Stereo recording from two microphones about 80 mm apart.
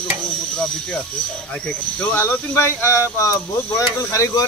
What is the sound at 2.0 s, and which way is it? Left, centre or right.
Speech, left.